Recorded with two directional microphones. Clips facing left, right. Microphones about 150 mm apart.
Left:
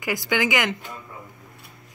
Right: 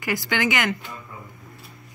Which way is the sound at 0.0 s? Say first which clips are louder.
Even; 15° left (ahead or behind).